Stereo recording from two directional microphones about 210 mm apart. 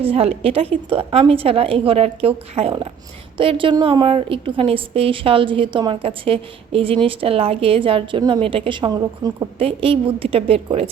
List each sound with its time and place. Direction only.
0.0 s a woman's voice: 30° right (ahead or behind)